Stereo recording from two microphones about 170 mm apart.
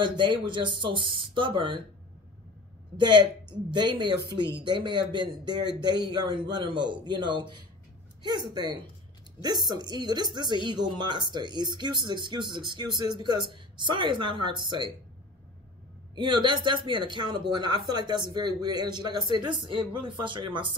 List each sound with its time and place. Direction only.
0.0 s speech: 30° right (ahead or behind)
3.0 s speech: 25° right (ahead or behind)
16.2 s speech: 30° right (ahead or behind)